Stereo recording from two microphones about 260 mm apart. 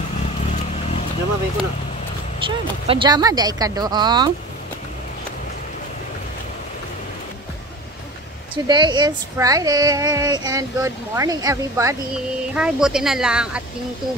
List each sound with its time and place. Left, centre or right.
2.4 s speech: centre
8.6 s speech: centre